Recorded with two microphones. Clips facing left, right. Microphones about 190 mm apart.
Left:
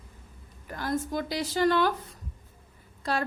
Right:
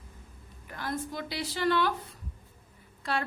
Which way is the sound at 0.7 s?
40° left (ahead or behind).